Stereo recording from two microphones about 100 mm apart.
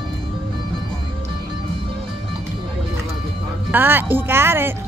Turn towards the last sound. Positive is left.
turn(degrees=-25)  # may be behind; listen again after turning